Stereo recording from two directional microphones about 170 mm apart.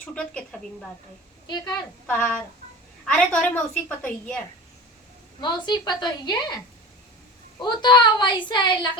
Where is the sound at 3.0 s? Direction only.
5° left (ahead or behind).